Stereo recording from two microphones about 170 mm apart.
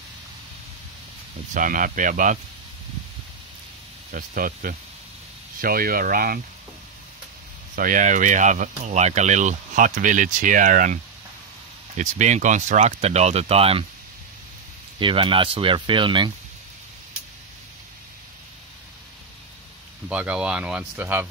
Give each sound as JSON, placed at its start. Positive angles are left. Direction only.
{"t": 1.5, "sound": "speech", "side_deg": -50}
{"t": 4.1, "sound": "speech", "side_deg": -55}
{"t": 7.7, "sound": "speech", "side_deg": -50}
{"t": 12.0, "sound": "speech", "side_deg": -45}
{"t": 15.0, "sound": "speech", "side_deg": -30}
{"t": 20.1, "sound": "speech", "side_deg": -5}